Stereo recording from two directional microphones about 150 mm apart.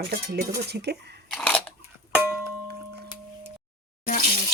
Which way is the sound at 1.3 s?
5° left (ahead or behind).